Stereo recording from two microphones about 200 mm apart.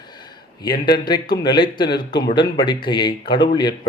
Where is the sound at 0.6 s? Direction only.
20° left (ahead or behind).